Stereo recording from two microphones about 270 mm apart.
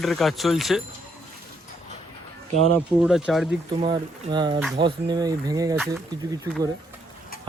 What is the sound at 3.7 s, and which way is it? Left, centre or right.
Speech, centre.